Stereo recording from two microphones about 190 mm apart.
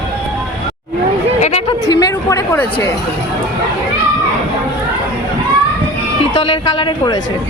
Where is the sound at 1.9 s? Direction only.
20° left (ahead or behind).